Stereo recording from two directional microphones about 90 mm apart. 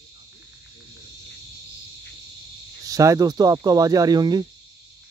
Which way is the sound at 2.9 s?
40° right (ahead or behind).